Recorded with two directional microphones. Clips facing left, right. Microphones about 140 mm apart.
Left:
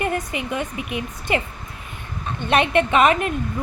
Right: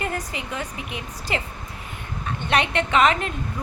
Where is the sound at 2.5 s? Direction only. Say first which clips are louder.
Left 4 dB; 20° left (ahead or behind).